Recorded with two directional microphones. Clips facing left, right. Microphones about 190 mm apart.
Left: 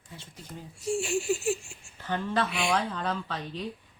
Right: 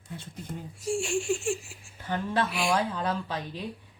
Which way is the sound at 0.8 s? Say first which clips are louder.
Even; centre (ahead or behind).